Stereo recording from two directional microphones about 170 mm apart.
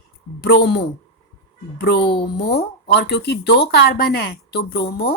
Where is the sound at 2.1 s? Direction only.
70° left (ahead or behind).